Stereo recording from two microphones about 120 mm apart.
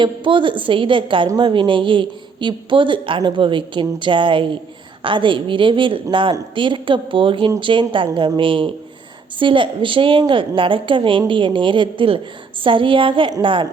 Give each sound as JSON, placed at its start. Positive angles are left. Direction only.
{"t": 0.0, "sound": "speech", "side_deg": -45}